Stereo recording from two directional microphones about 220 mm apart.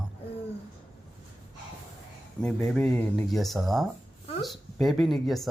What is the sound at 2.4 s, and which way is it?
Speech, 5° left (ahead or behind).